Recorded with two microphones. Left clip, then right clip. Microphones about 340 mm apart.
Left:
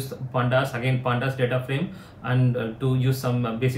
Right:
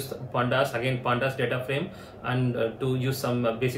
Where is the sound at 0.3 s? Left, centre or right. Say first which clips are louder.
Left 1 dB; centre.